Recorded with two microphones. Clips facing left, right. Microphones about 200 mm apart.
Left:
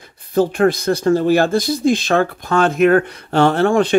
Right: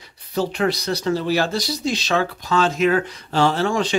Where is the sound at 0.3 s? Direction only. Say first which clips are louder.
Left 7 dB; 50° left (ahead or behind).